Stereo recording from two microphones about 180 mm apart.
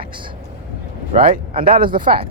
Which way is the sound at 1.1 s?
50° right (ahead or behind).